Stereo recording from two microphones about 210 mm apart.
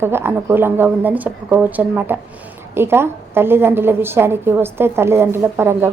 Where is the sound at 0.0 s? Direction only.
10° right (ahead or behind).